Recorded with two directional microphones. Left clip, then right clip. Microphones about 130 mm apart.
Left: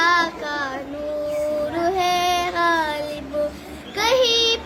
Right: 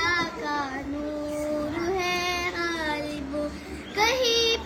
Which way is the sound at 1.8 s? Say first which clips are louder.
Left 9 dB; 25° left (ahead or behind).